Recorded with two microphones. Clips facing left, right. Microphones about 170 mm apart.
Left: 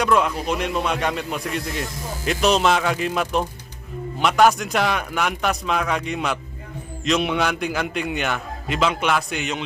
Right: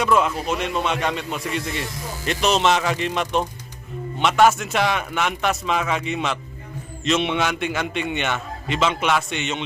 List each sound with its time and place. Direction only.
0.0 s speech: centre (ahead or behind)